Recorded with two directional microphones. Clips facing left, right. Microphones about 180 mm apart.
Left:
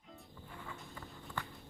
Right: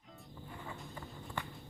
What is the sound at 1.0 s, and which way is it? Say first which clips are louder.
Walk: even; 15° right (ahead or behind).